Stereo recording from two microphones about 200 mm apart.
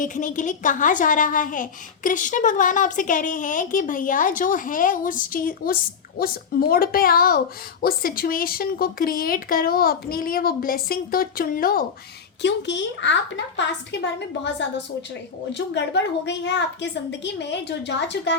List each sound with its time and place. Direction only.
0.0 s a woman's voice: 40° left (ahead or behind)
12.4 s a woman's voice: 60° left (ahead or behind)